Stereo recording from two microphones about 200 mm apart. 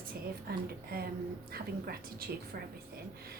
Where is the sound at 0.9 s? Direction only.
50° right (ahead or behind).